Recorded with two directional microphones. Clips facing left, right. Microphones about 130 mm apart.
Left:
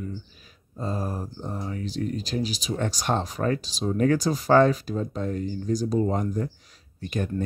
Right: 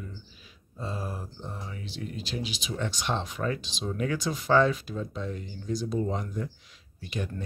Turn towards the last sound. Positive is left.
turn(degrees=45)  # may be behind; listen again after turning